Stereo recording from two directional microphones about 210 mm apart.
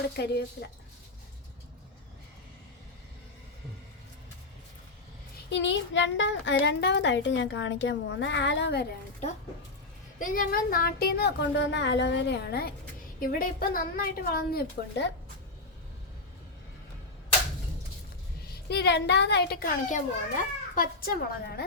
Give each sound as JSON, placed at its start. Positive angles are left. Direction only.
{"t": 0.2, "sound": "speech", "side_deg": 50}
{"t": 5.5, "sound": "a child's voice", "side_deg": 55}
{"t": 10.2, "sound": "speech", "side_deg": 40}
{"t": 18.7, "sound": "speech", "side_deg": 50}